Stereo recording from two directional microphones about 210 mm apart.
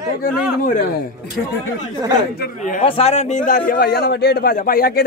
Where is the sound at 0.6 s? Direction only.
45° left (ahead or behind).